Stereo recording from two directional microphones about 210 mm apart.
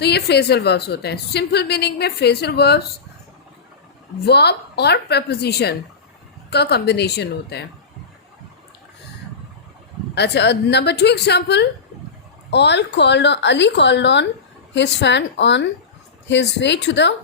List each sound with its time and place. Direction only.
0.0 s a woman's voice: 50° left (ahead or behind)
4.3 s a woman's voice: 50° left (ahead or behind)
10.2 s a woman's voice: 55° left (ahead or behind)